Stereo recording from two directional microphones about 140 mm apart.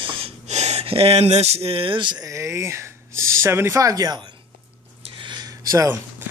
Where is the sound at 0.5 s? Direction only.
50° right (ahead or behind); by 4.2 s 25° right (ahead or behind).